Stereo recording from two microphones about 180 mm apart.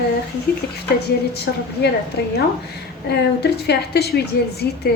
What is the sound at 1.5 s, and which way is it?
Speech, 65° left (ahead or behind).